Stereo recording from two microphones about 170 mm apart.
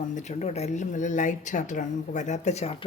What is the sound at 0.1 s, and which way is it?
Speech, 45° left (ahead or behind).